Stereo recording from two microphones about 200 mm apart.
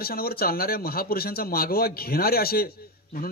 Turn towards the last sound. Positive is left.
turn(degrees=50)  # may be behind; listen again after turning